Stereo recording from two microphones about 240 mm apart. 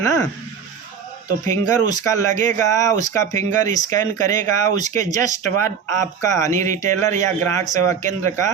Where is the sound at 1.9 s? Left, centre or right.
Centre.